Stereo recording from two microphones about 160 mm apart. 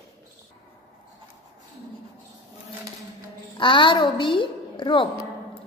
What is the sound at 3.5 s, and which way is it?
A woman's voice, 30° left (ahead or behind).